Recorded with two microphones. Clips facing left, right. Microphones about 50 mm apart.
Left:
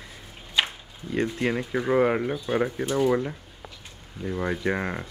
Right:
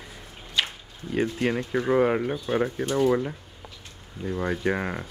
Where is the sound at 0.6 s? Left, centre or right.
Left.